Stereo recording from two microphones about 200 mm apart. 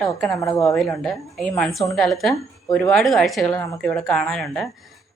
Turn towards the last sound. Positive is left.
turn(degrees=5)  # may be behind; listen again after turning